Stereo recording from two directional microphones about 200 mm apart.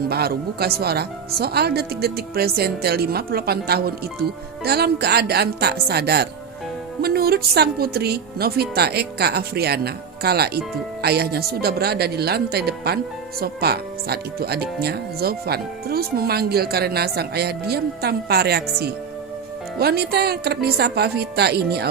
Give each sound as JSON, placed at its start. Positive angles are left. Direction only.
{"t": 0.1, "sound": "speech", "side_deg": -50}